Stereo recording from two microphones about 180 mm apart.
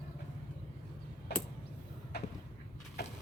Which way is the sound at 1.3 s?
70° left (ahead or behind).